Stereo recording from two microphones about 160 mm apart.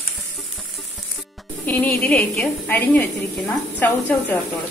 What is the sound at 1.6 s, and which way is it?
Speech, 10° left (ahead or behind).